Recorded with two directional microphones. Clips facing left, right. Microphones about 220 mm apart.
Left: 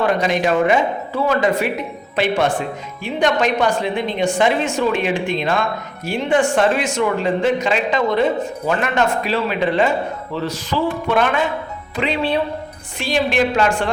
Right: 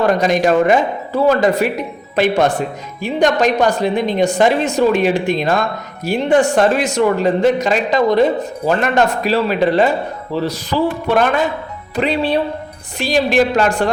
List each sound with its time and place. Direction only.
0.0 s speech: 40° right (ahead or behind)